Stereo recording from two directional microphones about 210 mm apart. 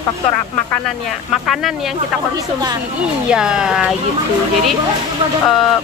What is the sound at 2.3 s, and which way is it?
Speech, 20° right (ahead or behind).